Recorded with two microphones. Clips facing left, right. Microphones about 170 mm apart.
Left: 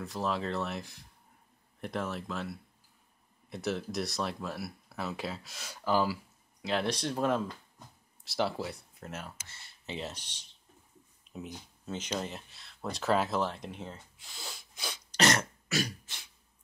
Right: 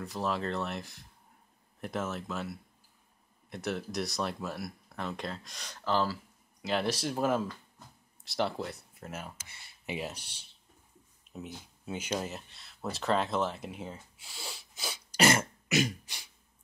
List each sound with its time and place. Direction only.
0.0 s speech: centre (ahead or behind)
6.6 s speech: centre (ahead or behind)
9.5 s speech: 10° right (ahead or behind)
15.7 s beatboxing: 15° right (ahead or behind)